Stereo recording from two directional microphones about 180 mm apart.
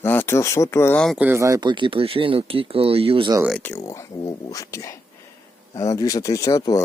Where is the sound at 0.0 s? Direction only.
10° left (ahead or behind).